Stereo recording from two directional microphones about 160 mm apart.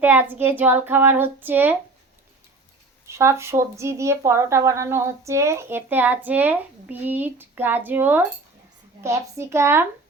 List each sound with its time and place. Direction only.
0.0 s speech: 10° right (ahead or behind)
3.1 s speech: 15° right (ahead or behind)